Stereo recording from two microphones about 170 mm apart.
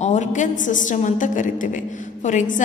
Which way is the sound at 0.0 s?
45° left (ahead or behind).